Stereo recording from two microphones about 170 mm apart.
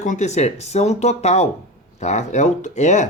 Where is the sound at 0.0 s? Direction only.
45° left (ahead or behind).